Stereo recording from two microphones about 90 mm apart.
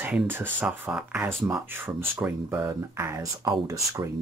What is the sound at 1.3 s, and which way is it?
Speech, 25° right (ahead or behind).